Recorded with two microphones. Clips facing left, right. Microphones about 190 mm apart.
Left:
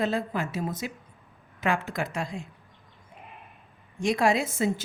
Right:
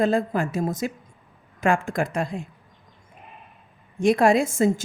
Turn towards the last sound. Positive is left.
turn(degrees=-45)  # may be behind; listen again after turning